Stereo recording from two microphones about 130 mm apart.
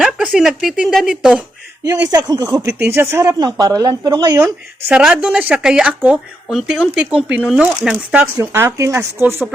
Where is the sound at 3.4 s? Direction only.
30° right (ahead or behind).